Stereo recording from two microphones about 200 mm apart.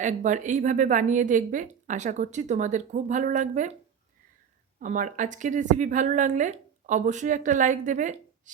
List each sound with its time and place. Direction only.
0.0 s a woman's voice: 40° right (ahead or behind)
4.8 s a woman's voice: 40° right (ahead or behind)